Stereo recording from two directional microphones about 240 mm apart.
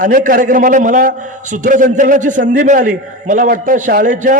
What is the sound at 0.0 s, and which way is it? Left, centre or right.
A man's voice, right.